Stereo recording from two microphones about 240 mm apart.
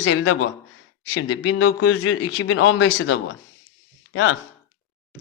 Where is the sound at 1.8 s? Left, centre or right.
Left.